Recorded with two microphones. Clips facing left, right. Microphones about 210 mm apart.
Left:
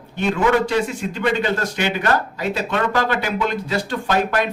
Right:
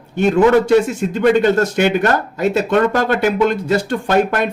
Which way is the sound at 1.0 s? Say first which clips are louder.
Right 8 dB; 50° right (ahead or behind).